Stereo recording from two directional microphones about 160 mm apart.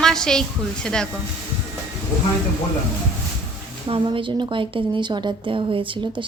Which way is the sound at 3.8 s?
35° right (ahead or behind).